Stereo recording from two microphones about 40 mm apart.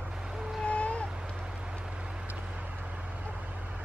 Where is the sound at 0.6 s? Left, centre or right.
Left.